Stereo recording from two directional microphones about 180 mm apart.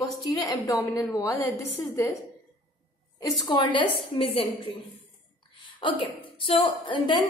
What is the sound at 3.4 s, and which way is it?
A woman's voice, 25° left (ahead or behind).